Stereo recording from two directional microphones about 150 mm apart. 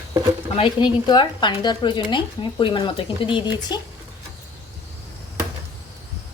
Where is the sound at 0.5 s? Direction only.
30° left (ahead or behind).